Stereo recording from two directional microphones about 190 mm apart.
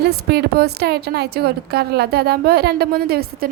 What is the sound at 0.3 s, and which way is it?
A woman's voice, 55° right (ahead or behind).